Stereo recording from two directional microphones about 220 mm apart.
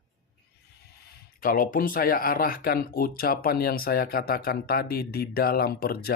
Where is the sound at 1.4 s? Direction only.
40° left (ahead or behind).